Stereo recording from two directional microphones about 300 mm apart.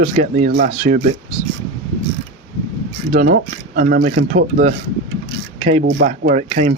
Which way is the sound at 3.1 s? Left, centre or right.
Right.